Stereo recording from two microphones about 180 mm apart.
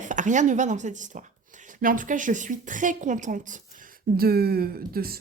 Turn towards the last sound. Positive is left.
turn(degrees=-55)  # may be behind; listen again after turning